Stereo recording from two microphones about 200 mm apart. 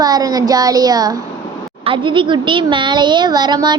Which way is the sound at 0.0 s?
20° right (ahead or behind).